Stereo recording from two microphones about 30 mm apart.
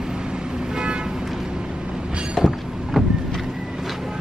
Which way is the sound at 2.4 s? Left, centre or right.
Centre.